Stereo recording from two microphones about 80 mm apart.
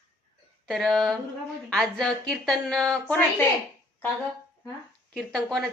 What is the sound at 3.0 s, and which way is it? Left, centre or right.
Speech, centre.